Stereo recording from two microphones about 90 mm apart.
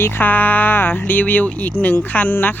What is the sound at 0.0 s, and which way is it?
A woman's voice, 25° left (ahead or behind).